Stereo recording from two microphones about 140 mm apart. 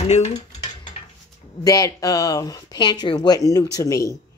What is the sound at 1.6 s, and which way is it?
Speech, 25° left (ahead or behind).